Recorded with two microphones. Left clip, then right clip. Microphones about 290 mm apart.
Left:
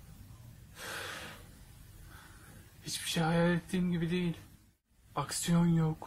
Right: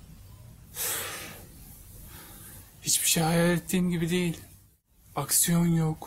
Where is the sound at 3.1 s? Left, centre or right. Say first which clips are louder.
Right 5 dB; centre.